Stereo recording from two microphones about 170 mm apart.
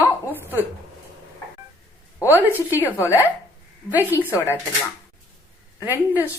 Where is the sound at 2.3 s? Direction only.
10° right (ahead or behind).